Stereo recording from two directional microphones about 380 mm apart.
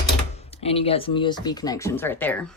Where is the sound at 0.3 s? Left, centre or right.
Centre.